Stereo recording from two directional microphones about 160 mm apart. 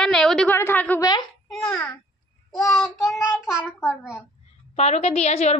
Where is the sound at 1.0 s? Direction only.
25° left (ahead or behind).